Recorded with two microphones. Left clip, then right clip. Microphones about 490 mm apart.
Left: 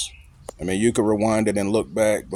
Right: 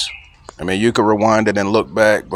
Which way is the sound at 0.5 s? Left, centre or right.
Left.